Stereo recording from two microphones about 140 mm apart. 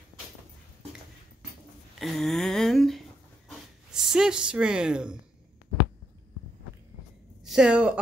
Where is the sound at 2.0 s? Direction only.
Centre (ahead or behind).